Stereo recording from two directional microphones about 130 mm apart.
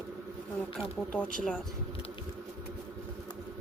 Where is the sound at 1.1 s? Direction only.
10° left (ahead or behind).